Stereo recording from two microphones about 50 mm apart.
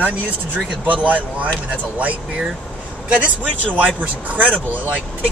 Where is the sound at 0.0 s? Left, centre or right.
Right.